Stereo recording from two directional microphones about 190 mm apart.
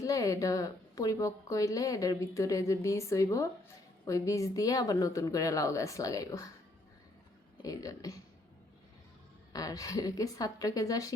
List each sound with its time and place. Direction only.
0.0 s a woman's voice: 15° left (ahead or behind)
7.6 s a woman's voice: 20° left (ahead or behind)
9.5 s a woman's voice: 20° left (ahead or behind)